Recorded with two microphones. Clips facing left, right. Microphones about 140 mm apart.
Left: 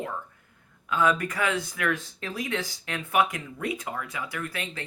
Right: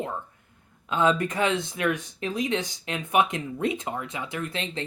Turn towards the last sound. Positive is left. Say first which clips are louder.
# right 3 dB
turn(degrees=-25)  # may be behind; listen again after turning